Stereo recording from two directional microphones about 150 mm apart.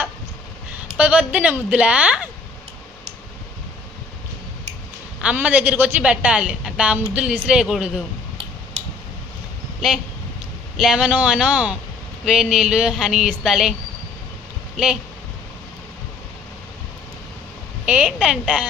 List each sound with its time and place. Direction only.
0.9 s a woman's voice: 10° right (ahead or behind)
5.2 s a woman's voice: 10° right (ahead or behind)
8.8 s tick: 50° right (ahead or behind)
9.8 s a woman's voice: 5° right (ahead or behind)
14.8 s speech: 5° right (ahead or behind)
17.8 s a woman's voice: 10° right (ahead or behind)